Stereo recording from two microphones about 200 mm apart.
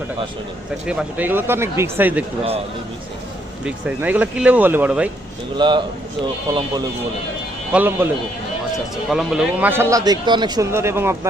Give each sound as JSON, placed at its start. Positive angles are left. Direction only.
{"t": 0.9, "sound": "a man's voice", "side_deg": -5}
{"t": 3.6, "sound": "a man's voice", "side_deg": -5}
{"t": 5.5, "sound": "speech", "side_deg": -25}
{"t": 7.7, "sound": "a man's voice", "side_deg": -10}